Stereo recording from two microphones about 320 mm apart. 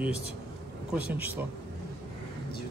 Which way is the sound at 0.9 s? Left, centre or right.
Centre.